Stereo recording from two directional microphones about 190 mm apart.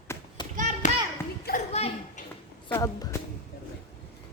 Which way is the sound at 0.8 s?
40° left (ahead or behind).